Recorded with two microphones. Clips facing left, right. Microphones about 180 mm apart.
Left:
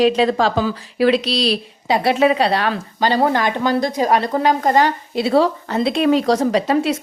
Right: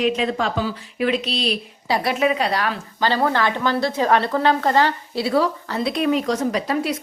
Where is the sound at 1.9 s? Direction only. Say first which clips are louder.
Left 5 dB; 30° left (ahead or behind).